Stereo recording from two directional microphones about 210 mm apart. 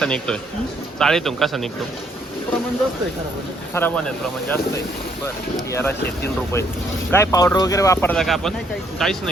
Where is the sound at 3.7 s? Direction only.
5° left (ahead or behind).